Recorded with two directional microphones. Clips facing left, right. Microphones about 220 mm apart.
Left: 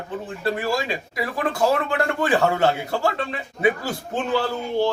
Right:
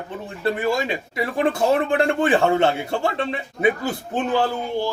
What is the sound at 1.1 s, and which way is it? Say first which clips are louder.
Speech: right 4 dB; 25° right (ahead or behind).